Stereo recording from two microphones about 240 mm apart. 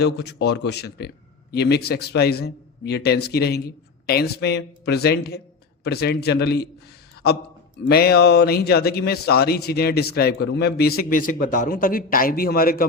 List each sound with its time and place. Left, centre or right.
0.0 s a man's voice: left